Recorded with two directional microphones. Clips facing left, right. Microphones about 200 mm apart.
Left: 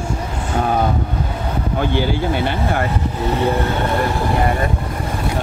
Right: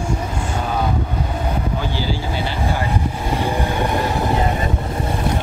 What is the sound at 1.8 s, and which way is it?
Speech, 55° left (ahead or behind).